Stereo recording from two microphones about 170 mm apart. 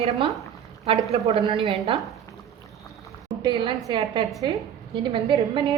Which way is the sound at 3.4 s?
25° right (ahead or behind).